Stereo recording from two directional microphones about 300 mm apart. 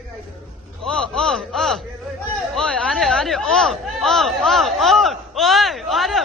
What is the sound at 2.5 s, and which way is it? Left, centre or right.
Speech, centre.